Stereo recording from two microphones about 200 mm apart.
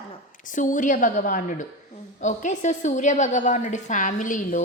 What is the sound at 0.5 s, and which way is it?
A woman's voice, 40° left (ahead or behind).